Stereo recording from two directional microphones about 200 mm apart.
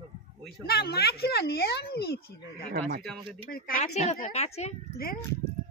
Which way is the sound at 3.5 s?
45° left (ahead or behind).